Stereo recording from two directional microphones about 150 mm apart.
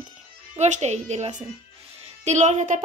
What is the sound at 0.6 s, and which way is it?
A woman's voice, 50° right (ahead or behind).